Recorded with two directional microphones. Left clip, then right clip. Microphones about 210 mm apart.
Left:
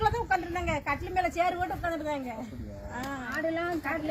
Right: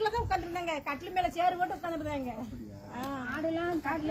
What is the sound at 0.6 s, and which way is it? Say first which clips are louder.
Speech: left 4 dB; 75° right (ahead or behind).